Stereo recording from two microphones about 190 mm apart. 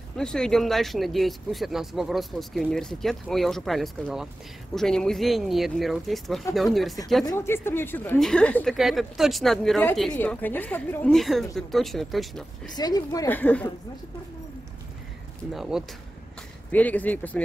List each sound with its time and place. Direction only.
0.2 s speech: 5° left (ahead or behind)
7.2 s speech: 15° left (ahead or behind)
12.7 s speech: 20° left (ahead or behind)
15.5 s speech: centre (ahead or behind)
16.7 s speech: 10° left (ahead or behind)